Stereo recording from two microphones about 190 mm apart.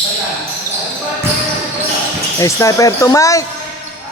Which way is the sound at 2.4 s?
15° left (ahead or behind).